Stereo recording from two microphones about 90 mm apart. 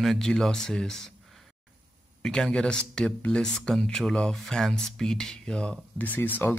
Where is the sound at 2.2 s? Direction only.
10° left (ahead or behind).